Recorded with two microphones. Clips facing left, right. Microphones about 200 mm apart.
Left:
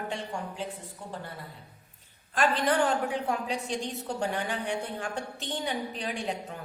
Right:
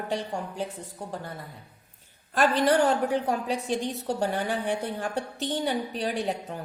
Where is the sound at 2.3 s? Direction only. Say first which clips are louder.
Right 4 dB; 40° right (ahead or behind).